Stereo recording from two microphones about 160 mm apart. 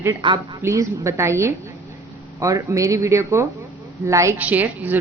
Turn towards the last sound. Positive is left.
turn(degrees=-10)  # may be behind; listen again after turning